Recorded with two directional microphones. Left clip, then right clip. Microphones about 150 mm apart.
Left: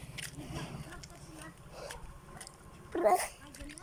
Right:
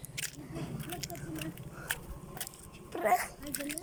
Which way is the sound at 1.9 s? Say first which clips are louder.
Right 10 dB; 90° right.